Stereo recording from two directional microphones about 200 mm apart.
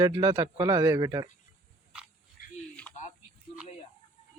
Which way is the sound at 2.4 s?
45° left (ahead or behind).